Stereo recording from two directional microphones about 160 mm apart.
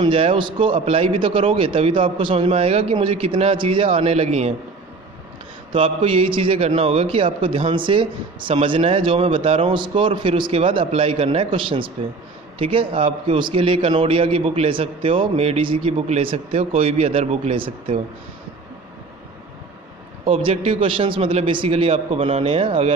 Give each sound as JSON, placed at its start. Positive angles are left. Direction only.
{"t": 0.0, "sound": "a man's voice", "side_deg": -35}
{"t": 5.7, "sound": "a man's voice", "side_deg": -35}
{"t": 20.2, "sound": "a man's voice", "side_deg": -40}